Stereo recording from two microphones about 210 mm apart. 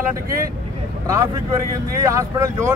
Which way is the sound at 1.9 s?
15° right (ahead or behind).